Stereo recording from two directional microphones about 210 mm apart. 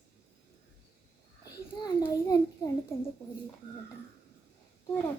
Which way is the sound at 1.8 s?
20° left (ahead or behind).